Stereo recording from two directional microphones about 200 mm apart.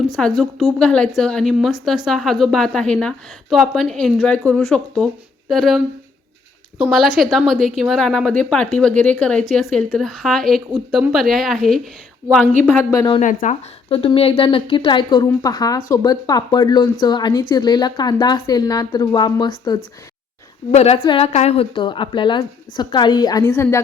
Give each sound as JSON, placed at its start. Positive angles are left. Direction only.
{"t": 0.2, "sound": "a woman's voice", "side_deg": 0}
{"t": 6.8, "sound": "a woman's voice", "side_deg": -5}
{"t": 12.9, "sound": "a woman's voice", "side_deg": 20}
{"t": 13.1, "sound": "a woman's voice", "side_deg": 35}
{"t": 20.7, "sound": "a woman's voice", "side_deg": 30}